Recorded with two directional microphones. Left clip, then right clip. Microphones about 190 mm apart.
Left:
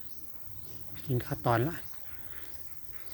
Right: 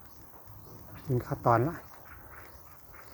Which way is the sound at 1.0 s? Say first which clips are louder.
Right 3 dB; 20° left (ahead or behind).